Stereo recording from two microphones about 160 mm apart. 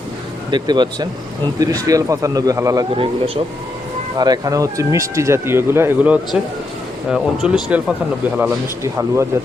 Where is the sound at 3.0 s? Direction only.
35° right (ahead or behind).